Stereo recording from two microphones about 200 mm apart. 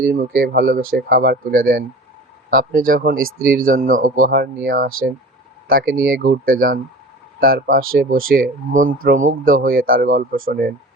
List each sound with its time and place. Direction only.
0.0 s speech: 45° right (ahead or behind)